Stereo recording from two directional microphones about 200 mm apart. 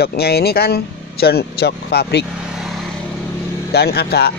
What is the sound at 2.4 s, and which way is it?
Vehicle, 5° right (ahead or behind).